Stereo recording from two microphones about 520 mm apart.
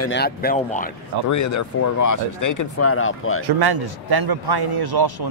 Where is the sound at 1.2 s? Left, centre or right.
Left.